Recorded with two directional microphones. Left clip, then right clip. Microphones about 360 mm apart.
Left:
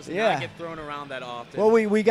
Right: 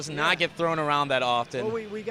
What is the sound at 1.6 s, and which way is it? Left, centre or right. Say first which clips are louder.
Speech: left 12 dB; left.